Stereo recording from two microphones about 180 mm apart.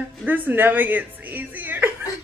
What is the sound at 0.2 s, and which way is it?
A woman's voice, 10° right (ahead or behind).